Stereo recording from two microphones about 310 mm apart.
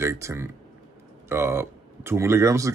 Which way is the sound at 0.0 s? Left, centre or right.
Centre.